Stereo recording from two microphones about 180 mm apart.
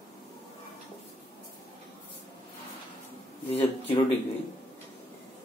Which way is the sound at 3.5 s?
35° left (ahead or behind).